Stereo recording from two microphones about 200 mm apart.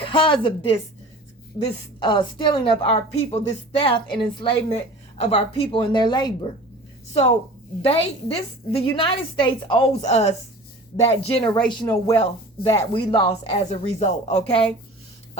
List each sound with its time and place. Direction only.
0.0 s a woman's voice: 25° left (ahead or behind)
7.8 s a woman's voice: 30° left (ahead or behind)